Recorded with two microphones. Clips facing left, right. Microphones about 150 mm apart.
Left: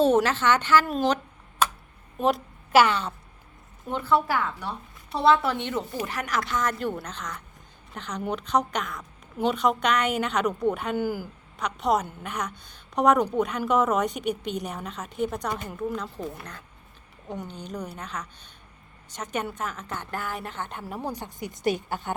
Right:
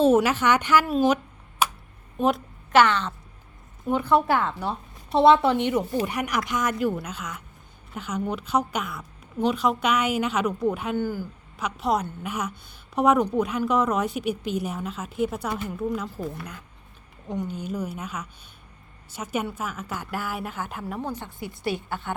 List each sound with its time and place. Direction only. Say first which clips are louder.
0.0 s a woman's voice: right 2 dB; 5° right (ahead or behind)
0.9 s a sound: right 3 dB; 5° right (ahead or behind)
2.1 s a woman's voice: right 1 dB; centre (ahead or behind)
3.8 s a woman's voice: right 3 dB; 15° right (ahead or behind); by 11.3 s 10° left (ahead or behind)
11.5 s a woman's voice: left 1 dB; centre (ahead or behind)
21.0 s speech: right 1 dB; 10° left (ahead or behind)